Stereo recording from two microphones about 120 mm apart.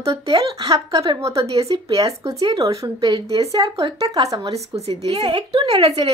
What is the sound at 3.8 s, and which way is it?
Speech, 35° right (ahead or behind).